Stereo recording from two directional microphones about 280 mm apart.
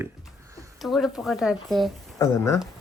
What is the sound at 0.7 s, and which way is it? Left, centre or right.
Speech, centre.